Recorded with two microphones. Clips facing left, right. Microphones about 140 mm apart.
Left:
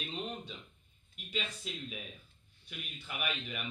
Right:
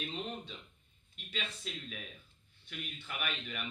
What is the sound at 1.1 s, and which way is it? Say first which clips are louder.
A man's voice: left 3 dB; 15° left (ahead or behind).